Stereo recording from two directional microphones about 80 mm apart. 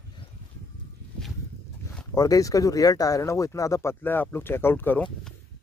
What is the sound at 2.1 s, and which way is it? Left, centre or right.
Speech, left.